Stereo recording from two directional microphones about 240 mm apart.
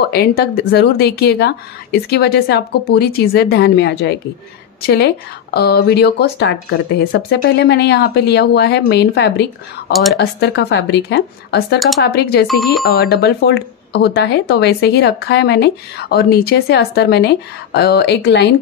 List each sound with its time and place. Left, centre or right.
0.1 s speech: left
12.4 s speech: centre
12.8 s speech: left